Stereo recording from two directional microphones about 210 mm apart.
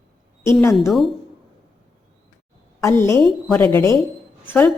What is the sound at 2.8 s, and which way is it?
A woman's voice, 15° left (ahead or behind).